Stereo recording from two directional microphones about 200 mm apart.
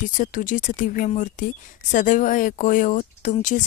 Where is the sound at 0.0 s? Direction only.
40° left (ahead or behind).